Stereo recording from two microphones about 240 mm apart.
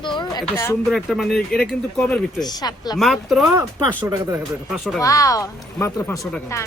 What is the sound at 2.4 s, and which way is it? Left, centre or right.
Speech, centre.